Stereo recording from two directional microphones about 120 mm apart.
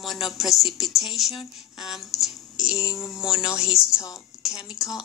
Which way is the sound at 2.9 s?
25° left (ahead or behind).